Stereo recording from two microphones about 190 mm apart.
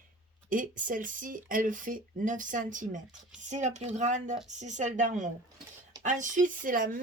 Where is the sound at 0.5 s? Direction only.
45° right (ahead or behind).